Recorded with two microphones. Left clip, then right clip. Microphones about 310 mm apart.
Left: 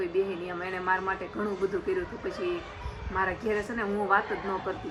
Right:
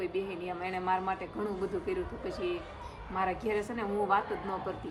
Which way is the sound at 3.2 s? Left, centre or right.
Centre.